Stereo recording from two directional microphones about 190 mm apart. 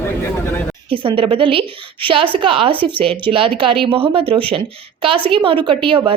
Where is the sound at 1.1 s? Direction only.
30° right (ahead or behind).